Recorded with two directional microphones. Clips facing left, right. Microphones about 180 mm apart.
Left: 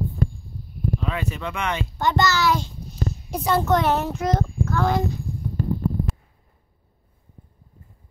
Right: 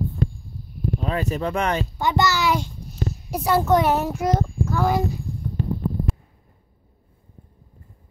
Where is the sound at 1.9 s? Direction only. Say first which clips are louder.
Left 3 dB; 10° right (ahead or behind).